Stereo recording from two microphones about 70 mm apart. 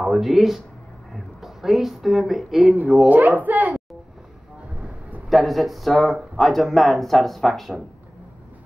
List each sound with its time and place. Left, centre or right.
0.0 s speech: centre
3.1 s a woman's voice: right
4.7 s a sound: centre
5.3 s speech: centre